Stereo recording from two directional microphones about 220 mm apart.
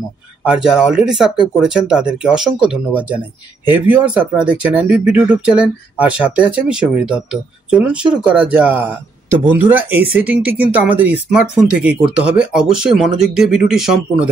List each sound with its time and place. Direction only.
0.4 s speech: 5° right (ahead or behind)